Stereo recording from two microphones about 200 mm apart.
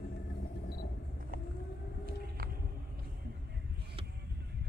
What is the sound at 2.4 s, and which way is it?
Vehicle, 45° right (ahead or behind).